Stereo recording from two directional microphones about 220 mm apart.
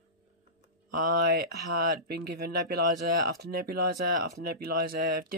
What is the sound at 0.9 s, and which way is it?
Speech, 40° right (ahead or behind).